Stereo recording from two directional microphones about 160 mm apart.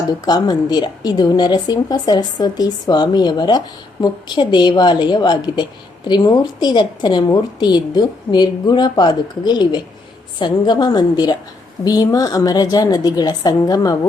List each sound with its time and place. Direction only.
0.3 s a woman's voice: 25° left (ahead or behind)